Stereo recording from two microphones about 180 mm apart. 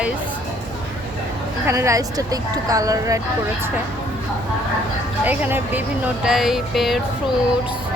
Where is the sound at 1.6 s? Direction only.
15° right (ahead or behind).